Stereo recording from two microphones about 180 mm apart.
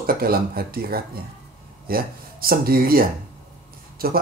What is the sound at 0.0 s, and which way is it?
Speech, 55° right (ahead or behind).